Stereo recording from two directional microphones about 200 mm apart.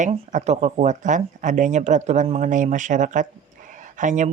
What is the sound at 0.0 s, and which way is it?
Speech, 40° right (ahead or behind).